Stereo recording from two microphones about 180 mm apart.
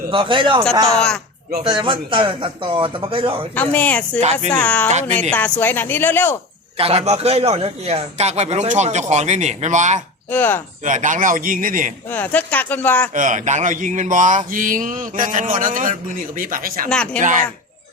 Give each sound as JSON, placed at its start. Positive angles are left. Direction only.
{"t": 0.1, "sound": "speech", "side_deg": -30}
{"t": 0.9, "sound": "speech", "side_deg": 5}
{"t": 1.6, "sound": "speech", "side_deg": -25}
{"t": 3.5, "sound": "speech", "side_deg": 10}
{"t": 4.9, "sound": "a man's voice", "side_deg": -40}
{"t": 5.3, "sound": "speech", "side_deg": 10}
{"t": 6.7, "sound": "a man's voice", "side_deg": -35}
{"t": 10.2, "sound": "speech", "side_deg": 10}
{"t": 10.8, "sound": "a sound", "side_deg": -45}
{"t": 12.0, "sound": "speech", "side_deg": 10}
{"t": 13.1, "sound": "a sound", "side_deg": -45}
{"t": 16.9, "sound": "speech", "side_deg": 5}
{"t": 17.2, "sound": "a sound", "side_deg": -45}